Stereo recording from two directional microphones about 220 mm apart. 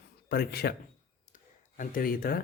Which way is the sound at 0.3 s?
45° left (ahead or behind).